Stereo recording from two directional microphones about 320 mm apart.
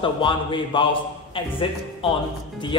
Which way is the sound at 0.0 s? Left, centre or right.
Centre.